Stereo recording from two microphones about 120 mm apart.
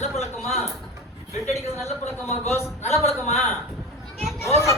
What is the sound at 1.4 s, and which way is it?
Speech, 65° left (ahead or behind).